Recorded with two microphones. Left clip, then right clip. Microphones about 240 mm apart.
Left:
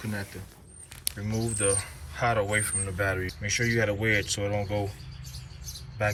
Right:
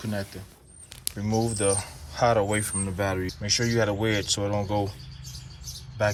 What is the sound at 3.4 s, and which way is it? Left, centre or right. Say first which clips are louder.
Speech: right 3 dB; right.